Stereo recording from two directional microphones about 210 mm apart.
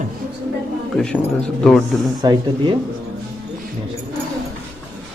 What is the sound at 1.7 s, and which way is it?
Speech, centre (ahead or behind).